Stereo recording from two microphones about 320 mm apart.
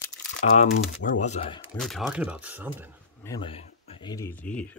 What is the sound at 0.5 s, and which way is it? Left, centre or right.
Speech, left.